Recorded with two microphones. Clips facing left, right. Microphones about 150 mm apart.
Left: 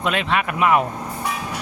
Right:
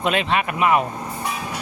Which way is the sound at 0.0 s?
25° right (ahead or behind).